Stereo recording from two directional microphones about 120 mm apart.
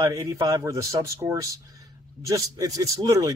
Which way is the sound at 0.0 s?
30° right (ahead or behind).